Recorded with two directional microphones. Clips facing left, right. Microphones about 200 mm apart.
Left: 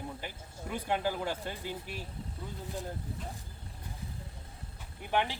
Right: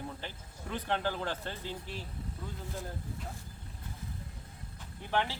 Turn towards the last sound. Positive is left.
turn(degrees=15)  # may be behind; listen again after turning